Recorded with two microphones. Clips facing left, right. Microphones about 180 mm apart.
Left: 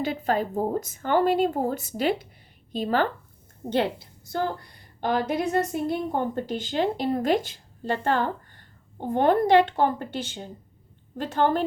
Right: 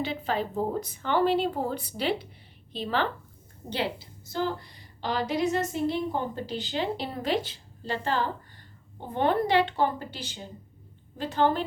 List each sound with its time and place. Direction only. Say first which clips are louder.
0.0 s a woman's voice: left 4 dB; 45° left (ahead or behind)
4.3 s a woman's voice: left 2 dB; 55° left (ahead or behind)